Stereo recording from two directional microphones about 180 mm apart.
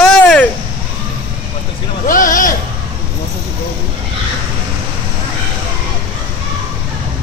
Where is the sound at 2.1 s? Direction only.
50° left (ahead or behind).